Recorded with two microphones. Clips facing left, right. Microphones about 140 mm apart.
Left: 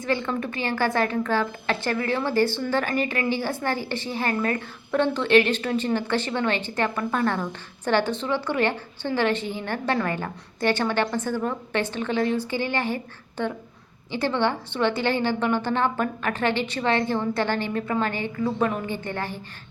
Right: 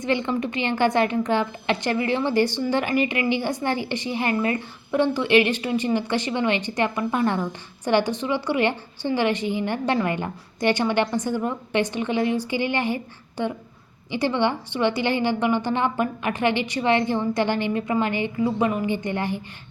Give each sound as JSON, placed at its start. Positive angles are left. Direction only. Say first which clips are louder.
{"t": 0.0, "sound": "a woman's voice", "louder": "right 2 dB", "side_deg": -20}